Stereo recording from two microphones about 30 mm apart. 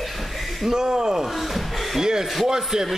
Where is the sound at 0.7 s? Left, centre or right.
Right.